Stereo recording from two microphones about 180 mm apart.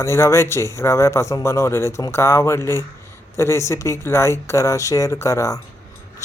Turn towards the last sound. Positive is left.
turn(degrees=15)  # may be behind; listen again after turning